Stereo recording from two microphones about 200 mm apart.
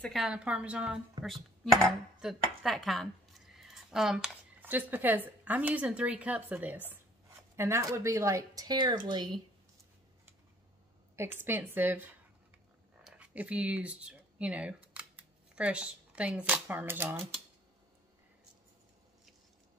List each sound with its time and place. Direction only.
0.0 s a woman's voice: centre (ahead or behind); by 9.3 s 20° right (ahead or behind)
11.4 s speech: 10° right (ahead or behind)